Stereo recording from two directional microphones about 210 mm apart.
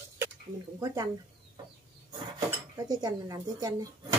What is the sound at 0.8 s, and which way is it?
Speech, 15° right (ahead or behind).